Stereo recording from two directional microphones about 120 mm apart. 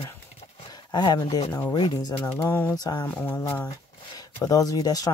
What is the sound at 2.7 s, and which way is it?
Speech, 35° left (ahead or behind).